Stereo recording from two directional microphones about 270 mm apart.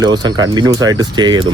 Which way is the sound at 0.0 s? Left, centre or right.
Centre.